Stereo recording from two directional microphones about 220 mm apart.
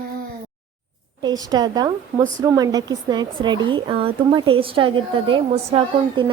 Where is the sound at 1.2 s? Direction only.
20° right (ahead or behind).